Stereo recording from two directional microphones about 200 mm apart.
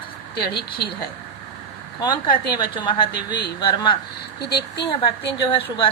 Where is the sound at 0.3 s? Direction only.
50° left (ahead or behind).